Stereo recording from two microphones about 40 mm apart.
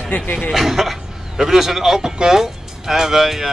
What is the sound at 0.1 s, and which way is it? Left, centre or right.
Speech, left.